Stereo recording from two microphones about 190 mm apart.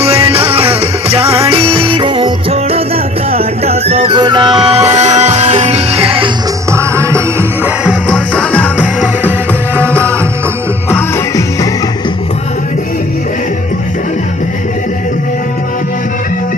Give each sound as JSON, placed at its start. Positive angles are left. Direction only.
{"t": 0.0, "sound": "music", "side_deg": -30}
{"t": 6.7, "sound": "music", "side_deg": -15}
{"t": 8.0, "sound": "music", "side_deg": 5}
{"t": 8.8, "sound": "music", "side_deg": -5}
{"t": 10.8, "sound": "music", "side_deg": 15}